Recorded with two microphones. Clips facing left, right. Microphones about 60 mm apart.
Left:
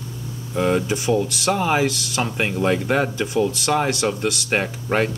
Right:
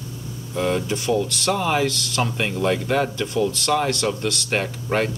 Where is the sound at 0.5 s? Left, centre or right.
Centre.